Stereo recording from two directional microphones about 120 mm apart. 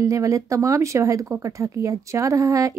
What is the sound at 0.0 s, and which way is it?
Speech, 25° right (ahead or behind).